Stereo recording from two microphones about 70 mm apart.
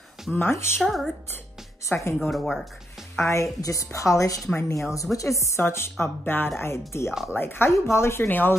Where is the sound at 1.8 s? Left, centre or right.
Left.